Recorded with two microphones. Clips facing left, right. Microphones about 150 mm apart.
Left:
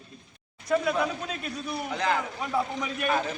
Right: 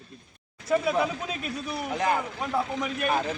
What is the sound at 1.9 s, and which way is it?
Speech, 20° right (ahead or behind).